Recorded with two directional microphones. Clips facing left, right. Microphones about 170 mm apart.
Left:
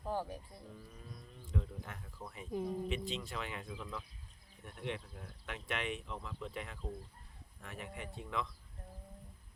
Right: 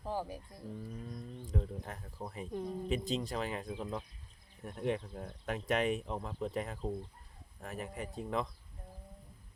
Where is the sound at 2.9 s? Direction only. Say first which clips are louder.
Right 5 dB; 40° right (ahead or behind).